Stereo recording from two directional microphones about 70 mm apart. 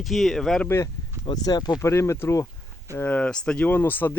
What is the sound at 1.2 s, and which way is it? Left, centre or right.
Speech, left.